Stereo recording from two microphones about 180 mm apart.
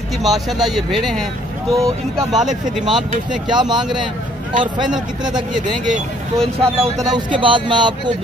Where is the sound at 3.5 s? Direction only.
25° right (ahead or behind).